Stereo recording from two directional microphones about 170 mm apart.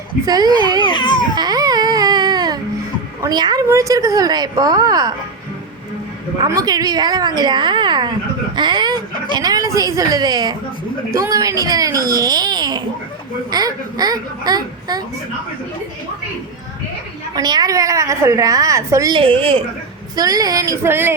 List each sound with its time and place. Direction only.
0.3 s a woman's voice: 25° right (ahead or behind)
0.8 s a sound: 25° left (ahead or behind)
1.4 s music: 25° right (ahead or behind)
3.2 s a woman's voice: 25° right (ahead or behind)
6.4 s a woman's voice: 20° right (ahead or behind)
8.5 s dog: 25° right (ahead or behind)
9.3 s a woman's voice: 20° right (ahead or behind)
17.3 s a woman's voice: 25° right (ahead or behind)
20.1 s a woman's voice: 20° right (ahead or behind)